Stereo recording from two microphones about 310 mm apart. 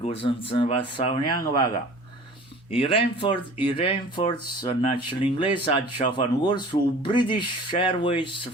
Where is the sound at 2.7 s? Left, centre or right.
Centre.